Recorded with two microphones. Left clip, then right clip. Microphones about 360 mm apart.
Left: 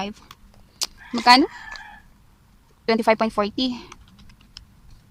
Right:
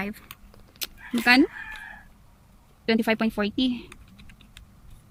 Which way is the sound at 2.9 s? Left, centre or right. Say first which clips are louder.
Left 5 dB; centre.